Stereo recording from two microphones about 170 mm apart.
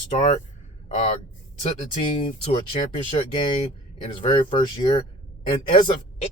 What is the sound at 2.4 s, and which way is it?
Speech, 35° left (ahead or behind).